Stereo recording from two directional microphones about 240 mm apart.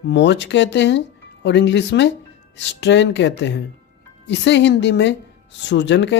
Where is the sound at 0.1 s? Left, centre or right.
Left.